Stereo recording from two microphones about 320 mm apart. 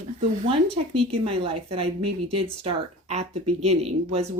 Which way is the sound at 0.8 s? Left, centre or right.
Centre.